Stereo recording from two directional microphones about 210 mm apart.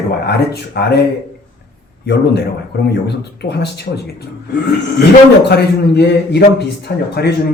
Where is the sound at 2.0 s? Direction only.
50° left (ahead or behind).